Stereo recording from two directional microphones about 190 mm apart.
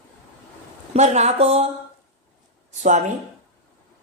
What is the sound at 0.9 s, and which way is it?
Speech, 35° right (ahead or behind).